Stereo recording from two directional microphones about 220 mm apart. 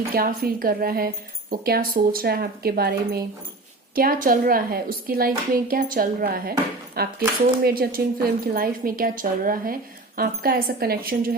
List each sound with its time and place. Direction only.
0.1 s a woman's voice: 40° right (ahead or behind)